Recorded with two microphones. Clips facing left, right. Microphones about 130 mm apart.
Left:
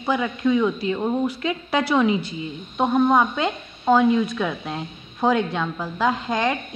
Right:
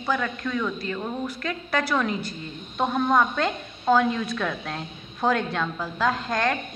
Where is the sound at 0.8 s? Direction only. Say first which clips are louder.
Left 7 dB; 25° left (ahead or behind).